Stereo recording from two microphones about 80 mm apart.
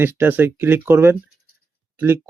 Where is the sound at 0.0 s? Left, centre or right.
Right.